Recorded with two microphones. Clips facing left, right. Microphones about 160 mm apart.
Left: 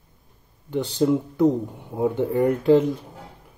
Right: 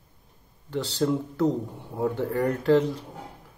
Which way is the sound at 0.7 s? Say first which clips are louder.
Left 5 dB; 20° left (ahead or behind).